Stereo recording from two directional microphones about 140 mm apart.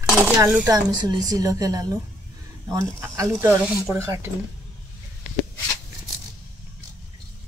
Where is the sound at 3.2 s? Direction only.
25° right (ahead or behind).